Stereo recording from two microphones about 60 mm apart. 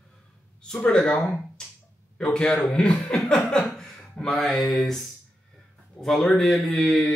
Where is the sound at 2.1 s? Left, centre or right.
Centre.